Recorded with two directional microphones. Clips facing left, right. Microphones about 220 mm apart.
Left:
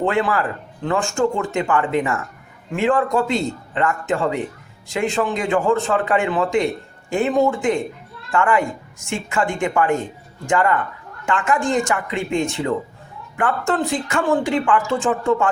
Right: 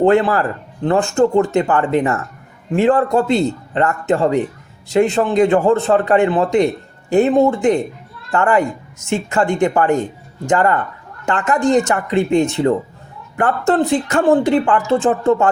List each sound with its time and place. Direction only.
0.0 s speech: 35° right (ahead or behind)